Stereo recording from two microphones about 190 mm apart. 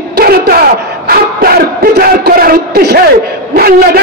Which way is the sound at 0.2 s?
55° right (ahead or behind).